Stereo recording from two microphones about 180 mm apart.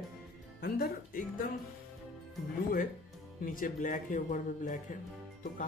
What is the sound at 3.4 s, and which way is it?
Speech, 50° left (ahead or behind).